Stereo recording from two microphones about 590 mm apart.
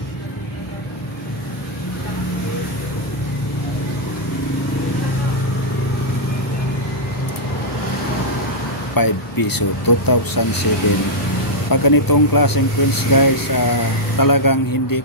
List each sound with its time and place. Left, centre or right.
8.9 s speech: left
11.7 s speech: left